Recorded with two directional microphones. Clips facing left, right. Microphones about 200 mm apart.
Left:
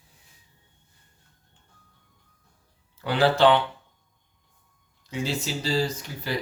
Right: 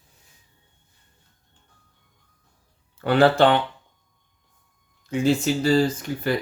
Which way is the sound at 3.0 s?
55° right (ahead or behind).